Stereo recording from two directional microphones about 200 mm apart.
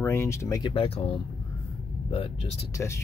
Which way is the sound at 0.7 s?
30° left (ahead or behind).